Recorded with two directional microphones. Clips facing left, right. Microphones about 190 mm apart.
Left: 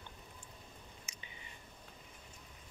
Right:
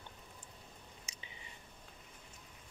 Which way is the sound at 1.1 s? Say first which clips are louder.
Even; 35° right (ahead or behind).